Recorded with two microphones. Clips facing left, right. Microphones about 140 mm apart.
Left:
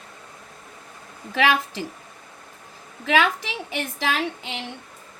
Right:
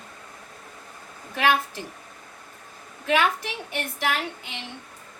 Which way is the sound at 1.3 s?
90° left.